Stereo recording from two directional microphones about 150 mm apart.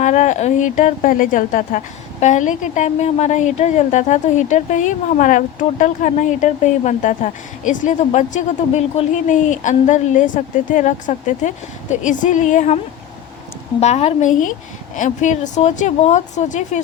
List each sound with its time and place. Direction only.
0.0 s a woman's voice: 50° left (ahead or behind)